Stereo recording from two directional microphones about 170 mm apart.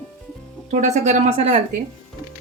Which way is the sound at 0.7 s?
45° right (ahead or behind).